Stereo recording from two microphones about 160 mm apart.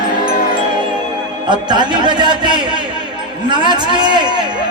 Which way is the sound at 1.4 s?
30° right (ahead or behind).